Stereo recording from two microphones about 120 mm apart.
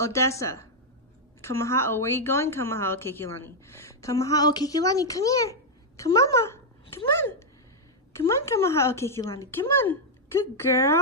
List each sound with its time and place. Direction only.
0.0 s a woman's voice: 25° left (ahead or behind)